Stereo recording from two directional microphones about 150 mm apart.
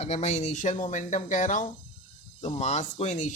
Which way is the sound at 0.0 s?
45° left (ahead or behind).